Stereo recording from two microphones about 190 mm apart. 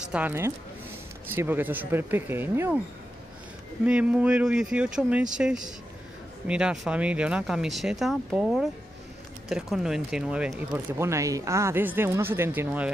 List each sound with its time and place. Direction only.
0.1 s speech: 10° right (ahead or behind)
3.8 s speech: 5° right (ahead or behind)